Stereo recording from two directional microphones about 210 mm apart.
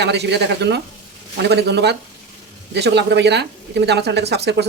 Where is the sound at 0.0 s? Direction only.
55° right (ahead or behind).